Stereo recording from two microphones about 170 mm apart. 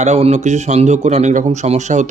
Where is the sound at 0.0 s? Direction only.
40° right (ahead or behind).